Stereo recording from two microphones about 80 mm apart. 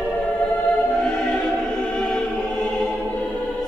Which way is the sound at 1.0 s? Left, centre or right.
Centre.